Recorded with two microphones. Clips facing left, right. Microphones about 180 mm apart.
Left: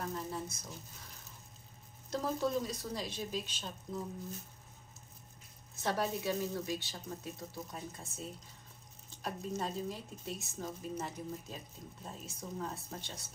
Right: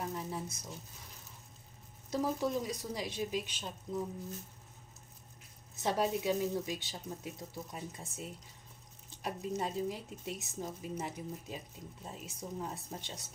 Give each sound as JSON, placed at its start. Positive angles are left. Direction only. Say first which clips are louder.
{"t": 0.0, "sound": "a sound", "louder": "even", "side_deg": -10}
{"t": 2.0, "sound": "speech", "louder": "right 1 dB", "side_deg": -10}
{"t": 5.8, "sound": "speech", "louder": "right 2 dB", "side_deg": -15}